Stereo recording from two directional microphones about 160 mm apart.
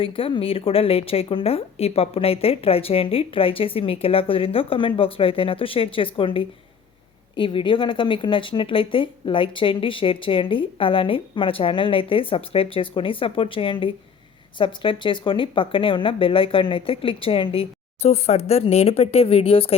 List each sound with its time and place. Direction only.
0.0 s speech: 35° left (ahead or behind)